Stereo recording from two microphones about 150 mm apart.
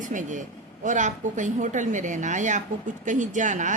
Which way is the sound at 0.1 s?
55° right (ahead or behind).